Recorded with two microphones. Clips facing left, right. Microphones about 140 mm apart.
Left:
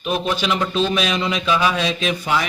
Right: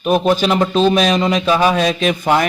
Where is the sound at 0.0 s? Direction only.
45° right (ahead or behind).